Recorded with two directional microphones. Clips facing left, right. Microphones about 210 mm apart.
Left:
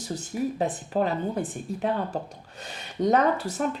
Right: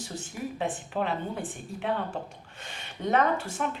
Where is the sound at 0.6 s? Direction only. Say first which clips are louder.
Left 2 dB; 40° left (ahead or behind).